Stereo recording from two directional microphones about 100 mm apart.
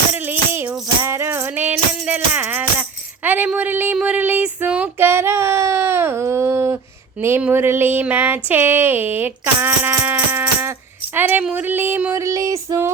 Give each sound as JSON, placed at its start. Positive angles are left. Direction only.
{"t": 0.1, "sound": "music", "side_deg": -20}
{"t": 3.2, "sound": "speech", "side_deg": -20}
{"t": 4.0, "sound": "child singing", "side_deg": -15}
{"t": 7.2, "sound": "speech", "side_deg": -25}
{"t": 12.1, "sound": "female singing", "side_deg": -30}